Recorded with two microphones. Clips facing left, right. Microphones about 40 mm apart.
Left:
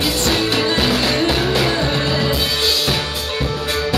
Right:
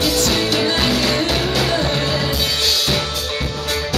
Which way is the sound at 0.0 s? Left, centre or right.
Left.